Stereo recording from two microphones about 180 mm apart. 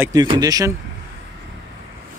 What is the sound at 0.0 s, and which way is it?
Speech, 20° right (ahead or behind).